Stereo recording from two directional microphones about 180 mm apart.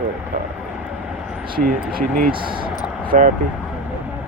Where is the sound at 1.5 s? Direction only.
55° right (ahead or behind).